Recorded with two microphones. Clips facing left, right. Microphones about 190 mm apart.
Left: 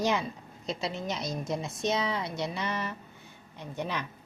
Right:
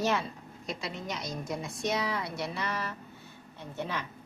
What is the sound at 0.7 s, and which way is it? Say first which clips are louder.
A woman's voice: left 4 dB; 25° left (ahead or behind).